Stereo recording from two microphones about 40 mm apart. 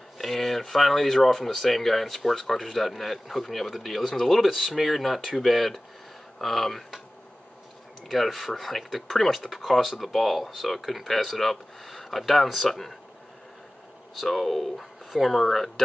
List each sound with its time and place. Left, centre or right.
0.2 s speech: centre
8.1 s speech: centre
14.1 s speech: centre